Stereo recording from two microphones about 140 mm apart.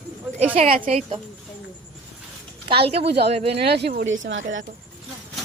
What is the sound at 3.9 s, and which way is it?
Speech, 90° right.